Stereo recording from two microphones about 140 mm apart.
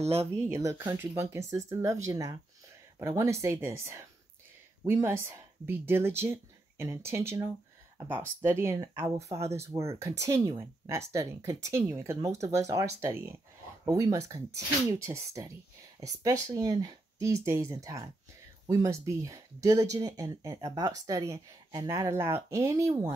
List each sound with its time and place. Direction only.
0.0 s speech: 45° right (ahead or behind)
0.5 s speech: 20° right (ahead or behind)